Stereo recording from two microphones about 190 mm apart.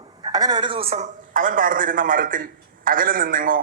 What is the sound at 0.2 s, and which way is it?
A man's voice, 20° right (ahead or behind).